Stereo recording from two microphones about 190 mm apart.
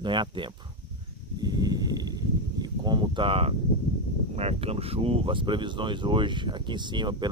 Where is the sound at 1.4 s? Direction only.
20° right (ahead or behind).